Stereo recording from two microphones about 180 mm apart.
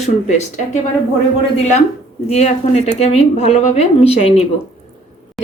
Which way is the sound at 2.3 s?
35° left (ahead or behind).